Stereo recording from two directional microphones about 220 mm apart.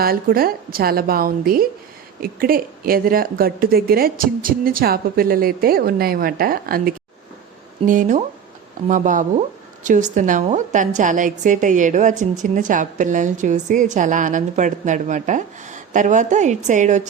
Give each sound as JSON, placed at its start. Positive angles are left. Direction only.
{"t": 0.0, "sound": "a woman's voice", "side_deg": -40}